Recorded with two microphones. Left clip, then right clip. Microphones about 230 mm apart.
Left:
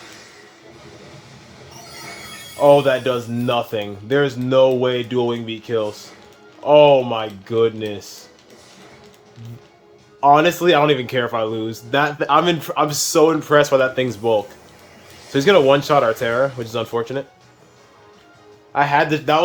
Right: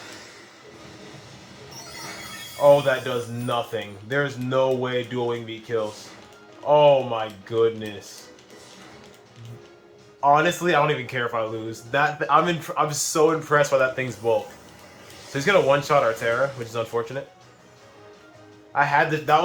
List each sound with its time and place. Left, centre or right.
2.6 s speech: left
10.2 s speech: left
18.7 s speech: left